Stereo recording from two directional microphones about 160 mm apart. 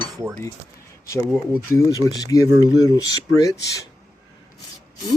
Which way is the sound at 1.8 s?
25° left (ahead or behind).